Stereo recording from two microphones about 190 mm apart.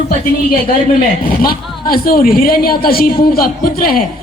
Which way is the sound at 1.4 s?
50° left (ahead or behind).